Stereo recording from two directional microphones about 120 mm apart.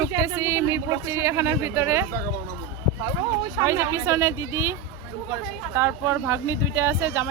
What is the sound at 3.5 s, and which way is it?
Speech, 25° right (ahead or behind).